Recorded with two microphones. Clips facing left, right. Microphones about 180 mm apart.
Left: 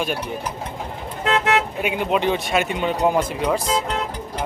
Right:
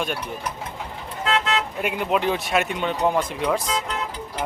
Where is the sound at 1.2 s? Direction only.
60° left (ahead or behind).